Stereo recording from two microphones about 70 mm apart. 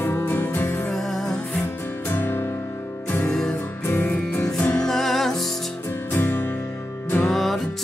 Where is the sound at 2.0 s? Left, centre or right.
Left.